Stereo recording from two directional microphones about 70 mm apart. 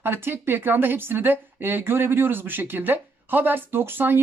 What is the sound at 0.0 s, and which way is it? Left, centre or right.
Speech, right.